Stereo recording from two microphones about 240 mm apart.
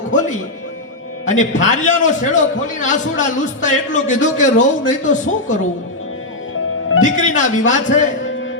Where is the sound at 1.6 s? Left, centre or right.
Left.